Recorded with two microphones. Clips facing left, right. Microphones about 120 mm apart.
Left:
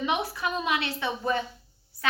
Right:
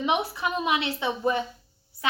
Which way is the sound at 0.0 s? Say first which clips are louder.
Right 2 dB; 20° right (ahead or behind).